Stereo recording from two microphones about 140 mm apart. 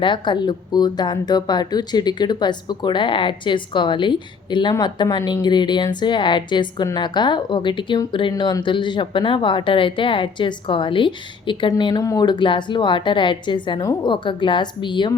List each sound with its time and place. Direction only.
0.0 s speech: 35° left (ahead or behind)